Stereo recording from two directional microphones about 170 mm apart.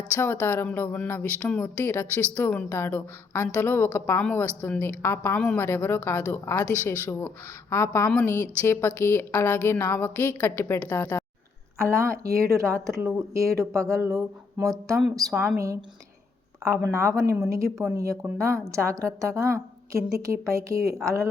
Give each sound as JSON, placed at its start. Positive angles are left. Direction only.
{"t": 0.1, "sound": "speech", "side_deg": 10}
{"t": 11.8, "sound": "a woman's voice", "side_deg": -15}
{"t": 16.9, "sound": "a woman's voice", "side_deg": -15}